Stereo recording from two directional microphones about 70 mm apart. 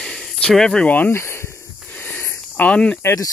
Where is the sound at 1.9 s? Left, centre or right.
Left.